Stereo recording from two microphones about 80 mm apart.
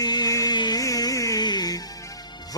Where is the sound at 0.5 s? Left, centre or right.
Left.